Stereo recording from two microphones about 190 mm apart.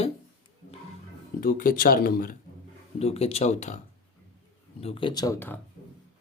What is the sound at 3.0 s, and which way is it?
Speech, 30° left (ahead or behind).